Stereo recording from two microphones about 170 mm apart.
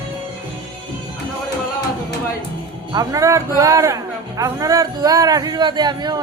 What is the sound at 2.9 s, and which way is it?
Speech, 20° right (ahead or behind).